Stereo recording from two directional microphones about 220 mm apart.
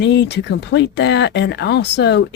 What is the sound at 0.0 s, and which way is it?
Speech, 50° left (ahead or behind).